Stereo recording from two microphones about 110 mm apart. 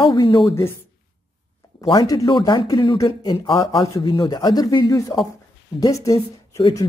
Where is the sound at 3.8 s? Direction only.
30° left (ahead or behind).